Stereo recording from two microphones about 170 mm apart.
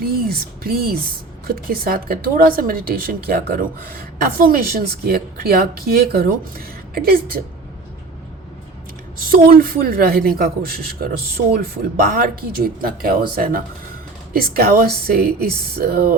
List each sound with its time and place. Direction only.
0.0 s a woman's voice: 60° right (ahead or behind)
9.1 s a woman's voice: 55° right (ahead or behind)